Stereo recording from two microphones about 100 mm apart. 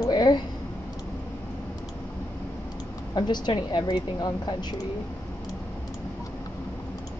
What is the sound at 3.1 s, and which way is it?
Speech, 45° left (ahead or behind).